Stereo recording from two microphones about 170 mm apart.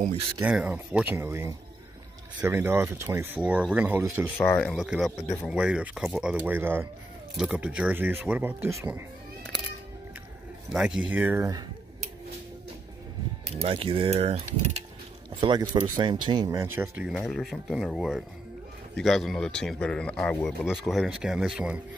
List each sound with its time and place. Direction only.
0.4 s speech: 10° right (ahead or behind)
4.4 s speech: 10° left (ahead or behind); by 9.0 s 15° right (ahead or behind)
10.7 s speech: 5° right (ahead or behind)
13.6 s speech: 35° right (ahead or behind)
15.4 s speech: 25° right (ahead or behind)
16.4 s speech: 15° right (ahead or behind)
17.3 s speech: centre (ahead or behind)